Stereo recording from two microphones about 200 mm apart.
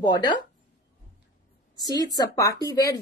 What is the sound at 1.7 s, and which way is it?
A woman's voice, 20° left (ahead or behind).